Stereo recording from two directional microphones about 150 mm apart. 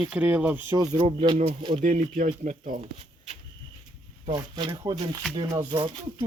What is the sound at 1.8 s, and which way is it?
Speech, 55° right (ahead or behind).